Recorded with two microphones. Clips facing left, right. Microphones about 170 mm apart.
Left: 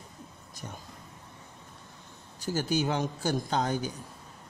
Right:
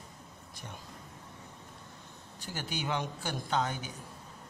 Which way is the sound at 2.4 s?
40° left (ahead or behind).